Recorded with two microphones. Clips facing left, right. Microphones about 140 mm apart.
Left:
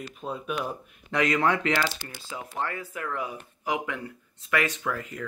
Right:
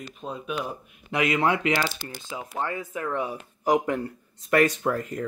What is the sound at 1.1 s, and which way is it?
A man's voice, 10° right (ahead or behind).